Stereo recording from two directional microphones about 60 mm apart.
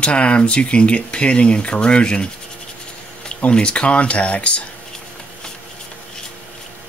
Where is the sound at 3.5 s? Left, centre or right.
Centre.